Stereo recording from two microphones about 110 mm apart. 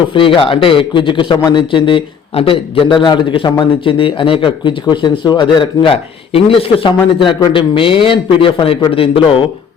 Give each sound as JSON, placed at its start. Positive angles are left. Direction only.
{"t": 0.1, "sound": "a man's voice", "side_deg": 50}